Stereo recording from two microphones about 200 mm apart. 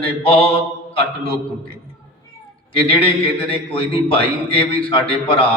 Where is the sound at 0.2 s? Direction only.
30° left (ahead or behind).